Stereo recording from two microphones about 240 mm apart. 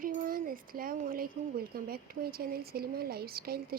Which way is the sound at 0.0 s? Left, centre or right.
Right.